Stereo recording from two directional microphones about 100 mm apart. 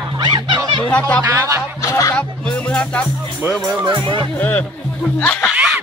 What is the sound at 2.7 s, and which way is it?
Speech, 15° left (ahead or behind).